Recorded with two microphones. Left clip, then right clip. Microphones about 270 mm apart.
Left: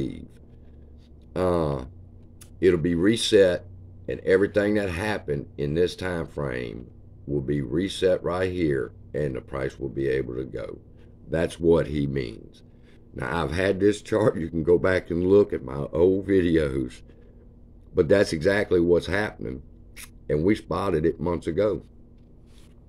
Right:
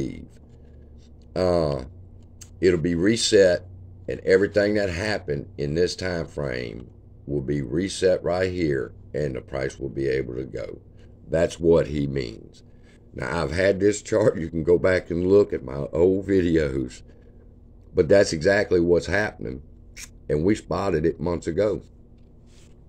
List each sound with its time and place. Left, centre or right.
0.0 s speech: centre
1.3 s speech: centre
13.7 s speech: left
14.1 s speech: centre